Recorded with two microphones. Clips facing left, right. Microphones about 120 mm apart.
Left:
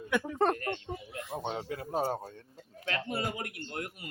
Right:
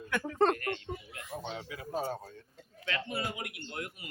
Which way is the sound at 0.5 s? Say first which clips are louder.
Left 1 dB; 25° left (ahead or behind).